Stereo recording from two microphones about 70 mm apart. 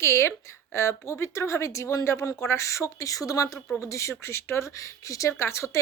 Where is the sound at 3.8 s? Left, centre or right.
Left.